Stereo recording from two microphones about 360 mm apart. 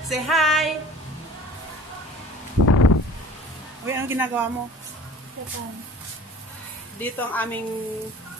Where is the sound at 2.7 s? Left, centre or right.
Left.